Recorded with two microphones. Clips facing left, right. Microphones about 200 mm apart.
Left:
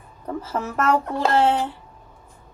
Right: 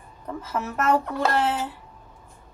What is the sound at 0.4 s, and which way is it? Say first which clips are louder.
A woman's voice: left 2 dB; 30° left (ahead or behind).